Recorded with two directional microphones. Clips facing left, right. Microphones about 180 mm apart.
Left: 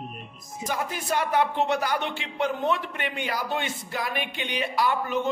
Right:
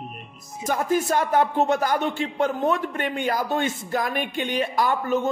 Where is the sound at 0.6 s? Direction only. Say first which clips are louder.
Right 8 dB; 45° right (ahead or behind).